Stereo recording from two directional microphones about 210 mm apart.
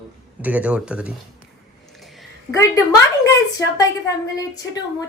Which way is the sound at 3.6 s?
15° left (ahead or behind).